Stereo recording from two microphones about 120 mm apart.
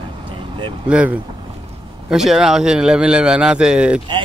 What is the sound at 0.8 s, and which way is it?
A man's voice, 10° right (ahead or behind).